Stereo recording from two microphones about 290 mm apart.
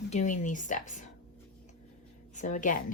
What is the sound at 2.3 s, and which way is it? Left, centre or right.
Speech, left.